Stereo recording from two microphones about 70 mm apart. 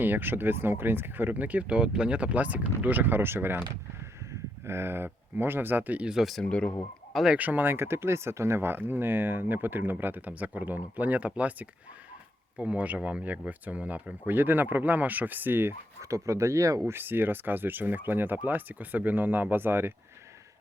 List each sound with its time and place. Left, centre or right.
0.0 s speech: right
4.6 s speech: right
6.1 s speech: centre
6.4 s speech: centre
7.3 s speech: right
16.0 s speech: right
16.8 s speech: right